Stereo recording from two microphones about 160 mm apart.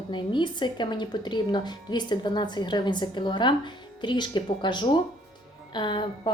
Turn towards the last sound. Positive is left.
turn(degrees=30)  # may be behind; listen again after turning